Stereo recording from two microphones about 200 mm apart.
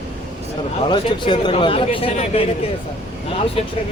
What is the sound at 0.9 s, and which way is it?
Speech, 25° left (ahead or behind).